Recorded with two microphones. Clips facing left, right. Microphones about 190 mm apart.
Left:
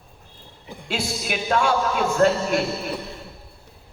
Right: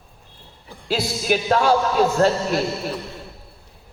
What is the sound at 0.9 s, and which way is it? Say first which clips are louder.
A man's voice: right 6 dB; 35° right (ahead or behind).